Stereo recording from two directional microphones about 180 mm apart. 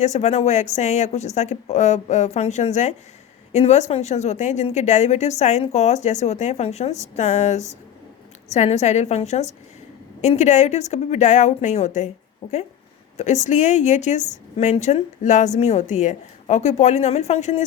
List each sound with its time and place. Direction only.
0.0 s a woman's voice: 40° left (ahead or behind)